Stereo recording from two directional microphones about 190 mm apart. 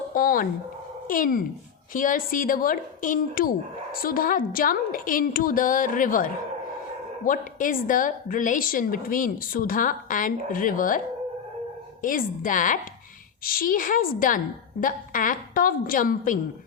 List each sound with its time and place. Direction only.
0.1 s a woman's voice: 50° left (ahead or behind)
12.0 s a woman's voice: 45° left (ahead or behind)